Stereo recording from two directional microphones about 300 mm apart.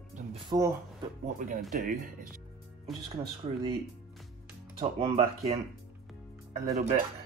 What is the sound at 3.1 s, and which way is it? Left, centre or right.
Speech, centre.